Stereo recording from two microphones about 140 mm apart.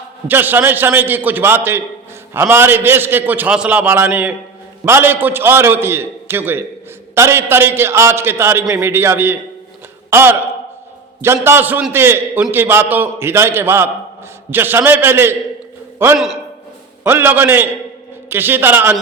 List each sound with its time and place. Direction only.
0.3 s a man's voice: 15° right (ahead or behind)
16.1 s a man's voice: 5° right (ahead or behind)
17.0 s a man's voice: 15° right (ahead or behind)